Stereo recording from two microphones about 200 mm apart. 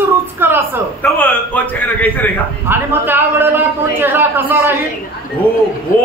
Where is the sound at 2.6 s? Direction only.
10° right (ahead or behind).